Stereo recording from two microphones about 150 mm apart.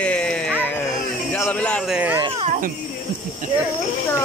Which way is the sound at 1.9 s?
10° right (ahead or behind).